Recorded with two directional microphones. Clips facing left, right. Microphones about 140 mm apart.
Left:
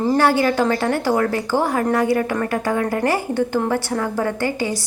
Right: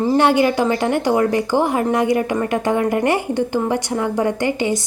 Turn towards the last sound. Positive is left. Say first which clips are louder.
# right 3 dB
turn(degrees=-20)  # may be behind; listen again after turning